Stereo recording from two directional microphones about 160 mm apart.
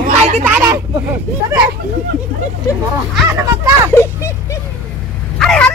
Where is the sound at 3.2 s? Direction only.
15° right (ahead or behind).